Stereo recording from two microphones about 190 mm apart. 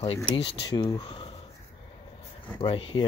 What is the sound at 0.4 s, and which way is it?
Speech, 20° left (ahead or behind).